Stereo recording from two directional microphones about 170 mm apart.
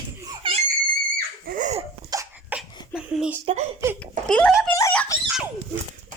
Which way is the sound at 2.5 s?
5° right (ahead or behind).